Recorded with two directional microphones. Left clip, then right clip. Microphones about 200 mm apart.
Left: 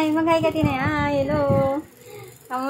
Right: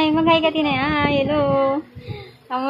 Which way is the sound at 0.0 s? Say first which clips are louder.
Right 3 dB; 20° right (ahead or behind).